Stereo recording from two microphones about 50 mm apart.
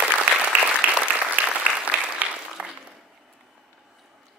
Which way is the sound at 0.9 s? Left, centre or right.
Right.